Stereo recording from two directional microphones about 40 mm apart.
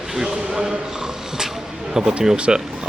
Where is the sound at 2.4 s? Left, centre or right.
Right.